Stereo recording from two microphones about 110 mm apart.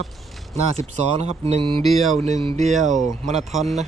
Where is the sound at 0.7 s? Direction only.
75° right (ahead or behind); by 1.8 s 55° right (ahead or behind).